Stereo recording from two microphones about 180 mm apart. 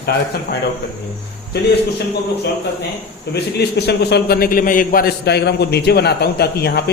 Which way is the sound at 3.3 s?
65° left (ahead or behind).